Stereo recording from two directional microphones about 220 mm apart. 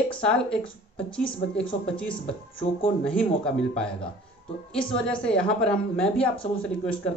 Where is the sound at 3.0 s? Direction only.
5° left (ahead or behind).